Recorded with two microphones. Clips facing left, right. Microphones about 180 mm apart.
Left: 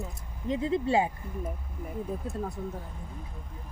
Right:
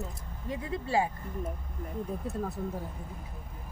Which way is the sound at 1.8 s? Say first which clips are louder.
Left 1 dB; 5° left (ahead or behind).